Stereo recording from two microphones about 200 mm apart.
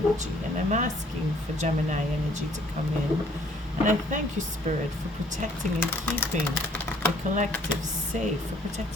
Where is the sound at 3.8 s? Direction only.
40° right (ahead or behind).